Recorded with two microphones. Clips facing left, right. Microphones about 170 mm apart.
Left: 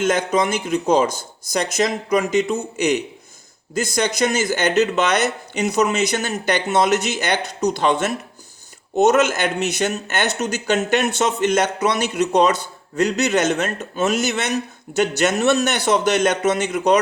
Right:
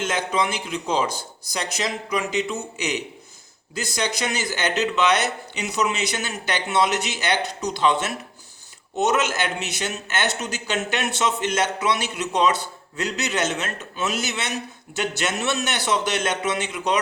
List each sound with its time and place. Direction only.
0.0 s speech: 50° left (ahead or behind)